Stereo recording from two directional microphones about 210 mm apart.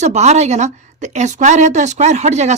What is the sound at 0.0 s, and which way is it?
A woman's voice, 35° right (ahead or behind).